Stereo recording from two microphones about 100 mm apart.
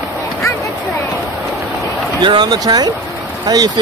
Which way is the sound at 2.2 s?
45° right (ahead or behind).